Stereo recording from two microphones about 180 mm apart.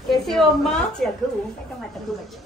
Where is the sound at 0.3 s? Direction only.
5° left (ahead or behind).